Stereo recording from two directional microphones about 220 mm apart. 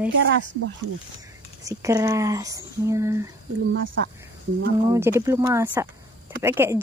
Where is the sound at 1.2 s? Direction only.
15° right (ahead or behind).